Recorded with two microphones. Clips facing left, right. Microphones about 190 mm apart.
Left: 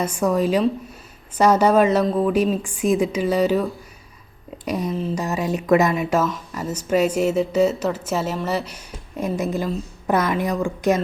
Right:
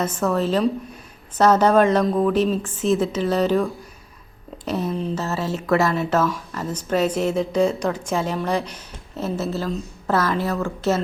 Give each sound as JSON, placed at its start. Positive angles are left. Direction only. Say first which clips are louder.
{"t": 0.0, "sound": "a woman's voice", "louder": "left 1 dB", "side_deg": 10}
{"t": 5.1, "sound": "a woman's voice", "louder": "left 2 dB", "side_deg": 15}